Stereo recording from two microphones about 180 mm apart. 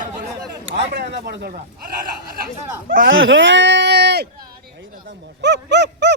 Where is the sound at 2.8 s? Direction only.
50° right (ahead or behind).